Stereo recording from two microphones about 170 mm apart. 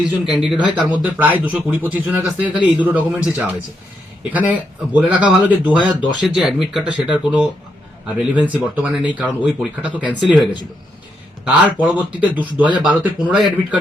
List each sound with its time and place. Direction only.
0.0 s speech: 5° right (ahead or behind)
5.8 s speech: 25° left (ahead or behind)
6.2 s speech: centre (ahead or behind)